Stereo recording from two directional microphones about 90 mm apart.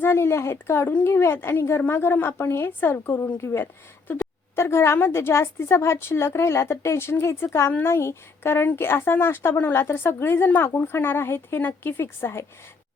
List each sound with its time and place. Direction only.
0.0 s a woman's voice: 25° left (ahead or behind)